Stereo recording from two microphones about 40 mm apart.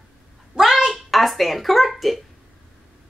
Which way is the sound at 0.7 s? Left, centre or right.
Centre.